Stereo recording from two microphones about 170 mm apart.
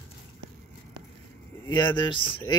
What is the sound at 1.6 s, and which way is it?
Speech, 25° left (ahead or behind).